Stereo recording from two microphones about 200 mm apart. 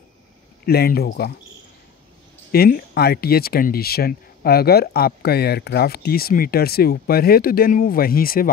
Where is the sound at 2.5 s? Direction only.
50° left (ahead or behind).